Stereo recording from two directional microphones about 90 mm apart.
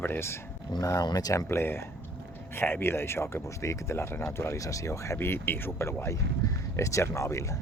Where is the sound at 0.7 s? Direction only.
45° left (ahead or behind).